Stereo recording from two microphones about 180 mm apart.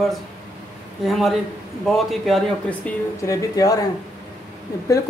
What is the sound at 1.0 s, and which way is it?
Speech, centre (ahead or behind).